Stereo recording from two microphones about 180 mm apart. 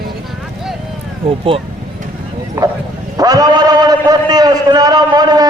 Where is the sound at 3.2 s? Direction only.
20° right (ahead or behind).